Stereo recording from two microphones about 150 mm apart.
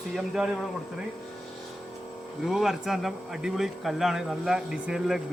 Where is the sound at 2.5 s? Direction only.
Centre (ahead or behind).